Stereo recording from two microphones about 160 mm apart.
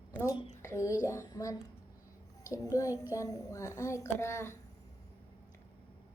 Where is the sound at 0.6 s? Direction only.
20° left (ahead or behind).